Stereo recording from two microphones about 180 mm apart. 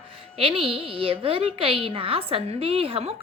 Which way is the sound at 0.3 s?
30° right (ahead or behind).